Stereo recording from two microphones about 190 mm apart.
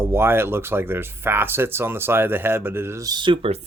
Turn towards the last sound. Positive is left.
turn(degrees=-30)  # may be behind; listen again after turning